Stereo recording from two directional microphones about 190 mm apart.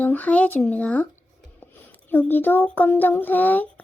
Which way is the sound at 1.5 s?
10° left (ahead or behind).